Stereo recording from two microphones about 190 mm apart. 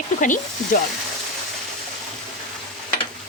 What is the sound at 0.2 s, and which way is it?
Speech, 45° left (ahead or behind).